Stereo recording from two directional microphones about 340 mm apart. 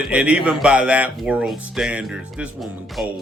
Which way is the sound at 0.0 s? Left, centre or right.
Centre.